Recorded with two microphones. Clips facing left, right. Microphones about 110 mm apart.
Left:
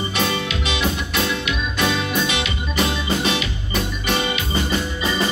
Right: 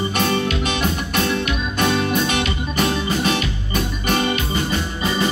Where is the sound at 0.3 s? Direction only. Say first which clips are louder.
Right 4 dB; 45° right (ahead or behind).